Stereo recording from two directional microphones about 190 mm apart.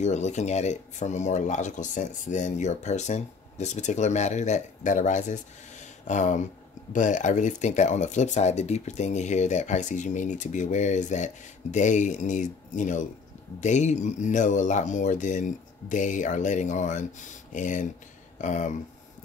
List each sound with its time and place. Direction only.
0.0 s speech: 35° left (ahead or behind)